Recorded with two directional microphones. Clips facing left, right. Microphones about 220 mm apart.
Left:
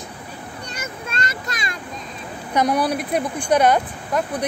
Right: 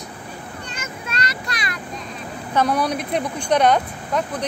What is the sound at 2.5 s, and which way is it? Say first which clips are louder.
Speech: left 1 dB; 15° left (ahead or behind).